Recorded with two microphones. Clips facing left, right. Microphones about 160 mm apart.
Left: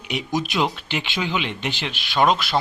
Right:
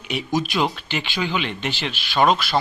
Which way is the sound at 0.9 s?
20° left (ahead or behind).